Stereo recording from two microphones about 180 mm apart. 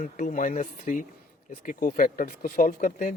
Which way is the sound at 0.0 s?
45° left (ahead or behind).